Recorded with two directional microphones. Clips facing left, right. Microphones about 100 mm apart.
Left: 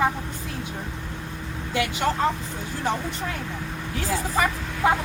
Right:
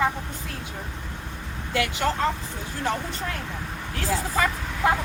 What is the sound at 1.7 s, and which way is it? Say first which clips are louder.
Speech: left 1 dB; 20° left (ahead or behind).